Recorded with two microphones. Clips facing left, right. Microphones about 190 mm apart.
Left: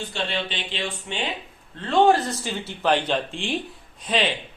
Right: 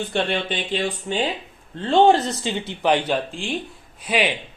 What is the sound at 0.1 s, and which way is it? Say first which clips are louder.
Speech: right 6 dB; 55° right (ahead or behind).